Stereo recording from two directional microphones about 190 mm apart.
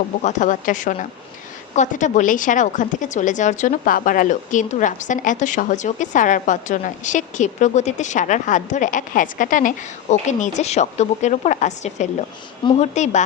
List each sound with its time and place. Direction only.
0.2 s a woman's voice: 40° left (ahead or behind)